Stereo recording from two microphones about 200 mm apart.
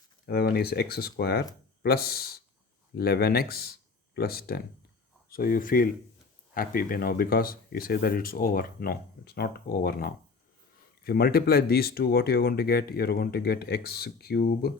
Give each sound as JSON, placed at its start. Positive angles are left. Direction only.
{"t": 0.3, "sound": "speech", "side_deg": 50}